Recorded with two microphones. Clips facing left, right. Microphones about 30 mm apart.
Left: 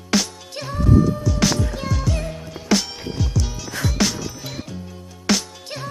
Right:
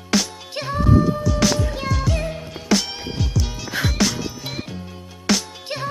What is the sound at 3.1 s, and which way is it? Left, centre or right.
Music, centre.